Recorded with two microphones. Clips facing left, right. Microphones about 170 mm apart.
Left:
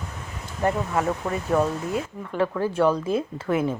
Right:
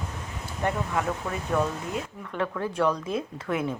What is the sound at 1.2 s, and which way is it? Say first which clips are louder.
Speech: left 5 dB; 20° left (ahead or behind).